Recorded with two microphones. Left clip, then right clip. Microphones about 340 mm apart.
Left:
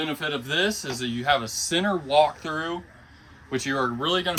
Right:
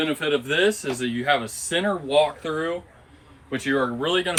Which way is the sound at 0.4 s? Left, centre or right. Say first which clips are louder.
Right 1 dB; centre.